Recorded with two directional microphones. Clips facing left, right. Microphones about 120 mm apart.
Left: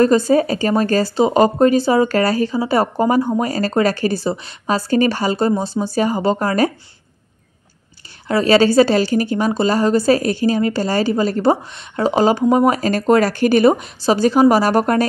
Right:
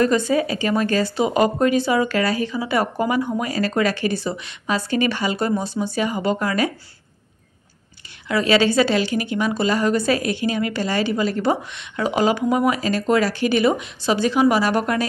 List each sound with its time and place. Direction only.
0.0 s speech: 35° left (ahead or behind)
8.3 s speech: 35° left (ahead or behind)